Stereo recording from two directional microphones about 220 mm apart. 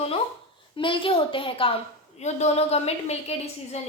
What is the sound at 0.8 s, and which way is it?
A woman's voice, 25° left (ahead or behind).